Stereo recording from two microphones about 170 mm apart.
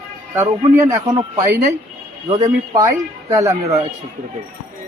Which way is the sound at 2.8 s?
20° right (ahead or behind).